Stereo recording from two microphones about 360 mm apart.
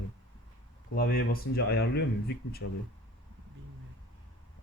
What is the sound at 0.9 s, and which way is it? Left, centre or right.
Speech, left.